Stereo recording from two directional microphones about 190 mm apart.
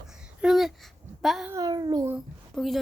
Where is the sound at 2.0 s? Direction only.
Centre (ahead or behind).